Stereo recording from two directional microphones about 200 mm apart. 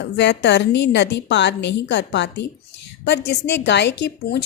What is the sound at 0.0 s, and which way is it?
A woman's voice, 60° left (ahead or behind).